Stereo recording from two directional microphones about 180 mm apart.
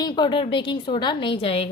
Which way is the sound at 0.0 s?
25° left (ahead or behind).